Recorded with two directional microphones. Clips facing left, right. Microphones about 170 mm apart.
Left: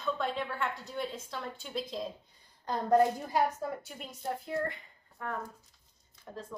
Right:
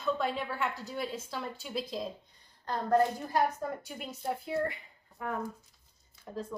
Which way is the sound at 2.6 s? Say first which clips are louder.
Left 1 dB; 15° left (ahead or behind).